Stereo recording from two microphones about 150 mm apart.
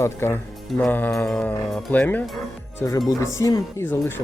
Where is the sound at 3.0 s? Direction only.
20° left (ahead or behind).